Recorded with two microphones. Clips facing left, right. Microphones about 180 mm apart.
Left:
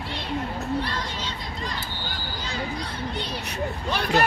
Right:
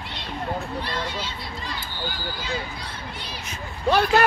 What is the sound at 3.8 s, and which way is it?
Speech, 55° right (ahead or behind).